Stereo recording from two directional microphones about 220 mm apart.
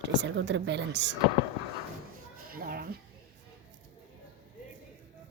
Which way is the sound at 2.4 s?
40° right (ahead or behind).